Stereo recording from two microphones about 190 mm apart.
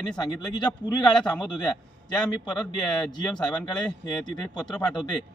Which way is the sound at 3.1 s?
20° left (ahead or behind).